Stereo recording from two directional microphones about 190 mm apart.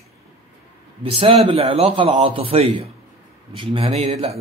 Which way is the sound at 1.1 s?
30° right (ahead or behind).